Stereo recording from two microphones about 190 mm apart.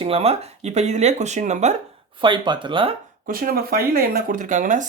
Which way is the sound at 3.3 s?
50° right (ahead or behind).